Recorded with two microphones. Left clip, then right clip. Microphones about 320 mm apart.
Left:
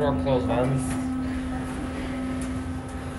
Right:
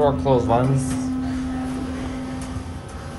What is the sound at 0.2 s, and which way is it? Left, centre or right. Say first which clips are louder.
Speech: right 6 dB; right.